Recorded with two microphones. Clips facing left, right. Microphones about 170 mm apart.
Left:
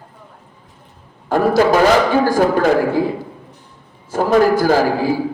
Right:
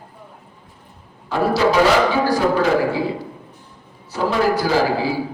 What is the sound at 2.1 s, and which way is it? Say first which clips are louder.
Music: left 3 dB; 50° left (ahead or behind).